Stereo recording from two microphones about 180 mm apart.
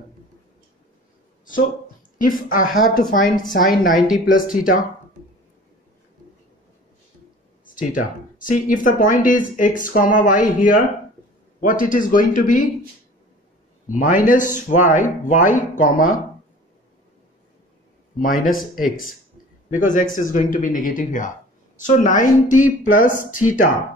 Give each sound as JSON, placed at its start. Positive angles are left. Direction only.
{"t": 2.1, "sound": "speech", "side_deg": 50}
{"t": 7.6, "sound": "a sound", "side_deg": 50}
{"t": 8.5, "sound": "speech", "side_deg": 50}
{"t": 13.9, "sound": "speech", "side_deg": 45}
{"t": 18.2, "sound": "speech", "side_deg": 50}
{"t": 18.6, "sound": "speech", "side_deg": 0}
{"t": 19.9, "sound": "speech", "side_deg": 45}